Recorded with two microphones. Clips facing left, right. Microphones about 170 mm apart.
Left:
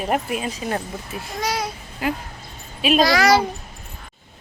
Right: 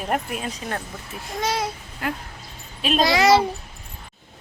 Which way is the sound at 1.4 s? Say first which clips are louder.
Even; 25° right (ahead or behind).